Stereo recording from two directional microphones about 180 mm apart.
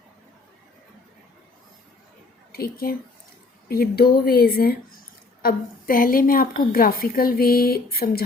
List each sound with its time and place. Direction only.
2.5 s a woman's voice: 55° left (ahead or behind)